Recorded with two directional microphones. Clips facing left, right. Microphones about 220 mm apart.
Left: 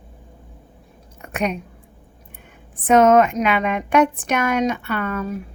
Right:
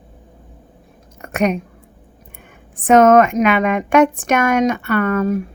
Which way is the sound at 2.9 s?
50° right (ahead or behind).